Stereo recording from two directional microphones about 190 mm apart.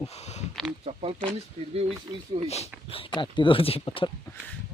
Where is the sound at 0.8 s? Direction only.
30° right (ahead or behind).